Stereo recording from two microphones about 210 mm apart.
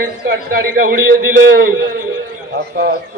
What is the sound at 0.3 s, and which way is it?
Speech, 45° right (ahead or behind).